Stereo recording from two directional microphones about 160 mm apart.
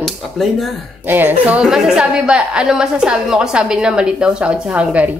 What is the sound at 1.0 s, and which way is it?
Speech, 10° right (ahead or behind).